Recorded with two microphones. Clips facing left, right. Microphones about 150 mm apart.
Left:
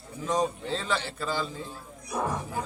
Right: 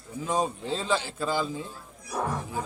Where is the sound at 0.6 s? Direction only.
15° right (ahead or behind).